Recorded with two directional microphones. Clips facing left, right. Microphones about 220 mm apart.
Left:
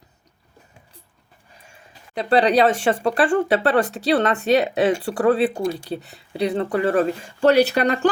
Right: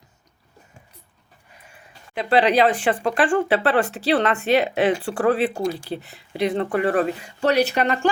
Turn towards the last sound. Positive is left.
turn(degrees=40)  # may be behind; listen again after turning